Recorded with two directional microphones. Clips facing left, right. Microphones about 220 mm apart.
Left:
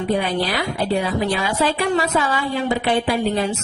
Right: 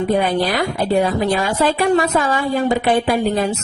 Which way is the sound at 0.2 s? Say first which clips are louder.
Right 4 dB; 50° right (ahead or behind).